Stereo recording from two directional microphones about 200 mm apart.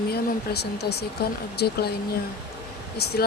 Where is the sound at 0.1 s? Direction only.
55° left (ahead or behind).